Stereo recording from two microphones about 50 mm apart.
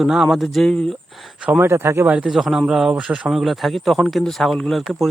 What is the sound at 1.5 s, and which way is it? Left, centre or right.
Speech, right.